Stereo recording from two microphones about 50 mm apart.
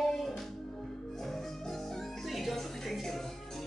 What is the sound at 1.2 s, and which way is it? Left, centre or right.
Music, centre.